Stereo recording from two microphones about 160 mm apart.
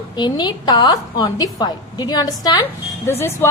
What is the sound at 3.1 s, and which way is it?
Speech, 15° left (ahead or behind).